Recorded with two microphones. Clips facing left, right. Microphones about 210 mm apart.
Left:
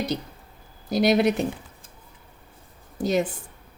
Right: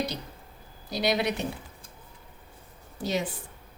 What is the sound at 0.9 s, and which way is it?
Speech, 50° left (ahead or behind).